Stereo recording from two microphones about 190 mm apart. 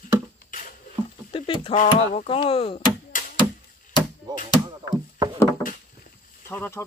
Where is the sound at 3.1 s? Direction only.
45° left (ahead or behind).